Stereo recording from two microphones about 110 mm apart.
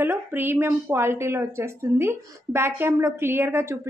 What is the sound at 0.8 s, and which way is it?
Speech, 25° right (ahead or behind).